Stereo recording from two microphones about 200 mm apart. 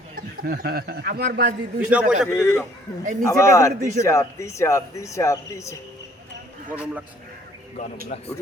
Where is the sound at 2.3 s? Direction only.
10° left (ahead or behind).